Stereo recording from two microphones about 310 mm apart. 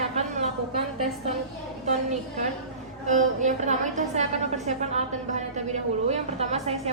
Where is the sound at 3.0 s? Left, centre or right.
Right.